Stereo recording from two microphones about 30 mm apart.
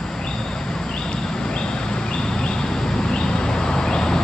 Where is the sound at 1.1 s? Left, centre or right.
Left.